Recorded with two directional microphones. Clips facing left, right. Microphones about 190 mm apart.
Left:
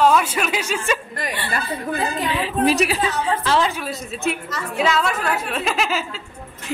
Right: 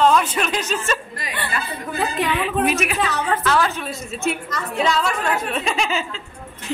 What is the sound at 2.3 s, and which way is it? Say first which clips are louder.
Speech: left 5 dB; 35° left (ahead or behind).